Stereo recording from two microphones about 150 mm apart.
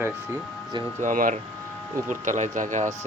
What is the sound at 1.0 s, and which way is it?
Speech, 60° right (ahead or behind).